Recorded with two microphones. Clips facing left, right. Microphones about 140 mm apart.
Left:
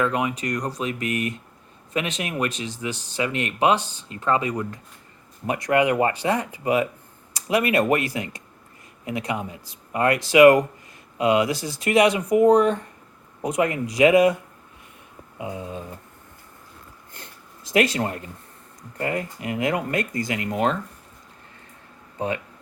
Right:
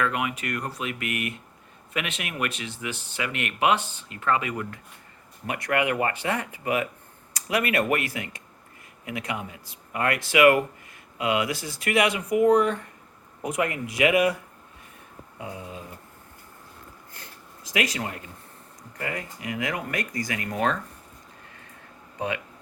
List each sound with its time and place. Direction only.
0.0 s speech: 30° left (ahead or behind)
15.4 s speech: 20° left (ahead or behind)
17.2 s a sound: 25° left (ahead or behind)
18.0 s speech: 35° left (ahead or behind)